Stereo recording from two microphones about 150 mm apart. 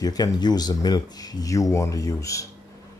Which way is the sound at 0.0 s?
25° left (ahead or behind).